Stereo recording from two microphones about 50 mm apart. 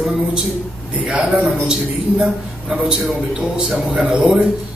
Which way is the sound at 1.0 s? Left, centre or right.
Right.